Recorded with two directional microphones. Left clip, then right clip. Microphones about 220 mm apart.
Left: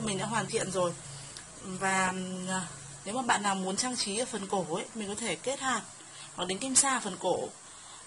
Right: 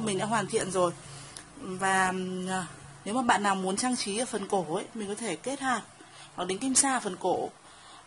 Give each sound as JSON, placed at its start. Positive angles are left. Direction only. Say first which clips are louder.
{"t": 0.0, "sound": "a woman's voice", "louder": "right 3 dB", "side_deg": -35}